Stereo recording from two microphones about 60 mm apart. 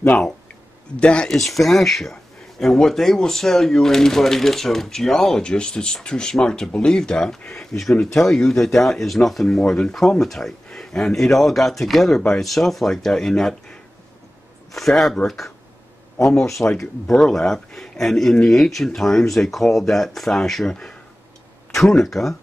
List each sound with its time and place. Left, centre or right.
0.9 s speech: centre
1.3 s speech: centre
14.7 s speech: centre
16.5 s speech: centre
21.7 s speech: centre